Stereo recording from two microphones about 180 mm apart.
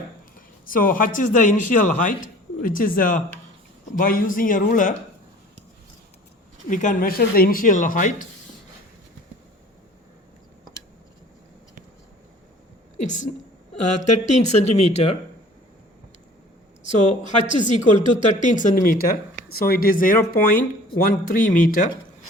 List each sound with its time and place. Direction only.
0.6 s speech: 50° left (ahead or behind)
6.7 s speech: 45° left (ahead or behind)
13.0 s speech: 45° left (ahead or behind)
17.2 s speech: 40° left (ahead or behind)